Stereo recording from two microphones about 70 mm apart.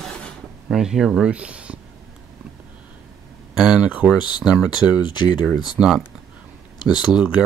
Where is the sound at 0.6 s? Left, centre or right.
Centre.